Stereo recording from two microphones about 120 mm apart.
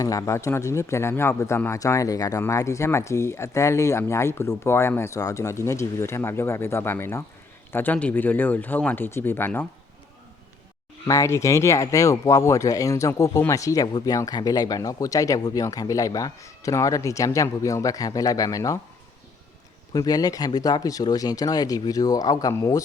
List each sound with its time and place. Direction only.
0.0 s speech: 30° left (ahead or behind)
11.0 s speech: 25° left (ahead or behind)
19.9 s speech: 30° left (ahead or behind)